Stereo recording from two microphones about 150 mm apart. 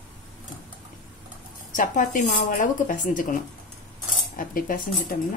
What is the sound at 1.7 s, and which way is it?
Speech, 60° left (ahead or behind).